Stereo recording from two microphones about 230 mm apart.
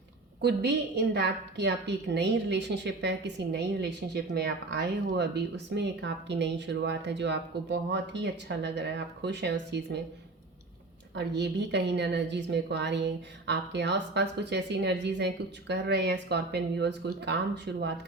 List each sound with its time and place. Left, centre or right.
0.4 s a woman's voice: right
11.1 s a woman's voice: right